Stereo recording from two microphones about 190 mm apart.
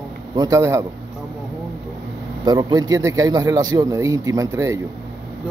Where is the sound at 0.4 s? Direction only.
15° right (ahead or behind).